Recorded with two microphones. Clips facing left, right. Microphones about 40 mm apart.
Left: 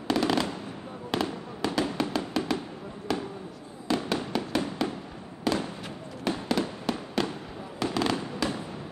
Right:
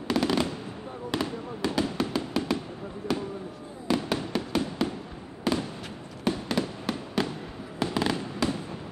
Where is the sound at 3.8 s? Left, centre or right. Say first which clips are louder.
Right 1 dB; centre.